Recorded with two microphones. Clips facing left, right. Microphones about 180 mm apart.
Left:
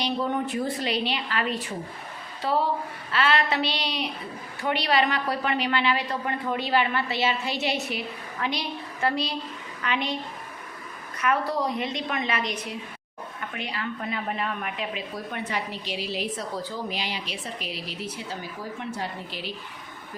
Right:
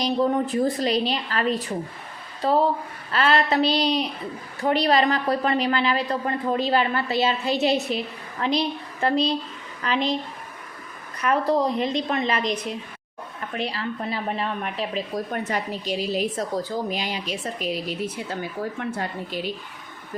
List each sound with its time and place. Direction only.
0.0 s a woman's voice: 35° right (ahead or behind)
11.2 s a woman's voice: 35° right (ahead or behind); by 19.5 s 50° right (ahead or behind)